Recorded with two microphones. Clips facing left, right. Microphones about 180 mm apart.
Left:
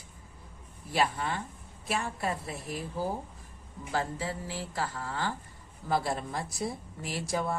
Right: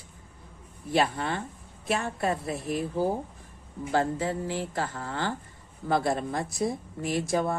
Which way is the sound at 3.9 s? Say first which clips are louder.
Right 6 dB; 55° right (ahead or behind).